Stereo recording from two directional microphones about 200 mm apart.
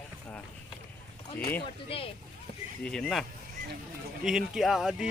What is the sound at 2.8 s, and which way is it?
Speech, 5° left (ahead or behind).